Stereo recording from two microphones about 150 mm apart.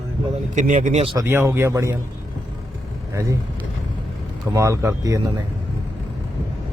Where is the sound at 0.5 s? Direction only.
55° right (ahead or behind).